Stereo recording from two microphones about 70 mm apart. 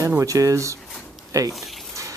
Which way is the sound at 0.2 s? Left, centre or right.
Right.